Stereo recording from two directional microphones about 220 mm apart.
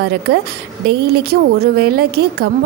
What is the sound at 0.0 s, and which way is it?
Speech, 50° right (ahead or behind).